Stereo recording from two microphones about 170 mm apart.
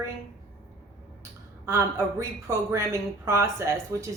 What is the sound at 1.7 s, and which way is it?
A woman's voice, 15° right (ahead or behind).